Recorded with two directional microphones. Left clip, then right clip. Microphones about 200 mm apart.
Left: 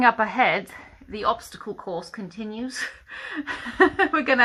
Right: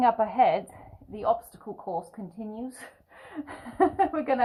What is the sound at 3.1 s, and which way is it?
A woman's voice, 55° left (ahead or behind).